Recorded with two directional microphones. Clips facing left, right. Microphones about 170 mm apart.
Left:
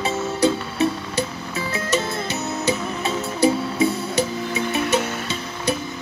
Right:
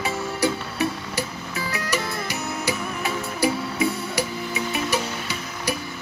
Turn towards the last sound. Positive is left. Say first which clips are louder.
# left 4 dB
turn(degrees=25)  # may be behind; listen again after turning